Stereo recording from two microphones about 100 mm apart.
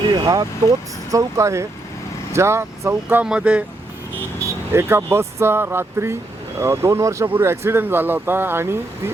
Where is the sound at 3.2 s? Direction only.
10° right (ahead or behind).